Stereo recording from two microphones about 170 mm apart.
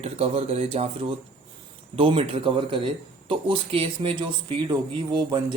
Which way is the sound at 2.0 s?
35° right (ahead or behind).